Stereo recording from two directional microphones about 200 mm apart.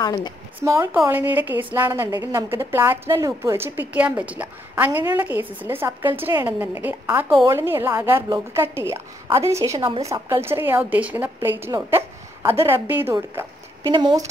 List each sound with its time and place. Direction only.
0.0 s speech: 20° left (ahead or behind)
0.7 s a woman's voice: 15° right (ahead or behind)